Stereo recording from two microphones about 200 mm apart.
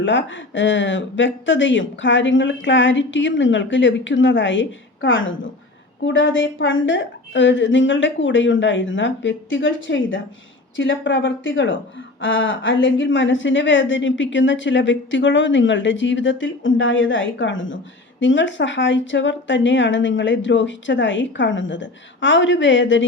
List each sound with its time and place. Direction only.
0.0 s a woman's voice: 65° left (ahead or behind)